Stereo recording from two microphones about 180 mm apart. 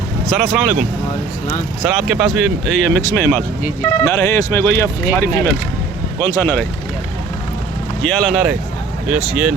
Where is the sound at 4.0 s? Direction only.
15° left (ahead or behind).